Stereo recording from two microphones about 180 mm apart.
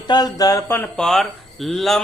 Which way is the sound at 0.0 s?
20° left (ahead or behind).